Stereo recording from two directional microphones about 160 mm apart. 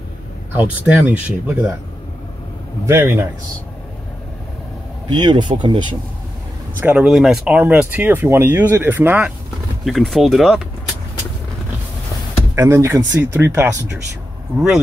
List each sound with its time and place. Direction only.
0.6 s speech: 10° right (ahead or behind)
2.9 s speech: 15° right (ahead or behind)
5.1 s speech: 30° right (ahead or behind)
6.8 s speech: 5° right (ahead or behind)
9.8 s speech: centre (ahead or behind)
12.5 s speech: 15° right (ahead or behind)